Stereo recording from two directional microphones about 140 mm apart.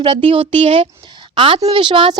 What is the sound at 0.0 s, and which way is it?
A woman's voice, 35° right (ahead or behind).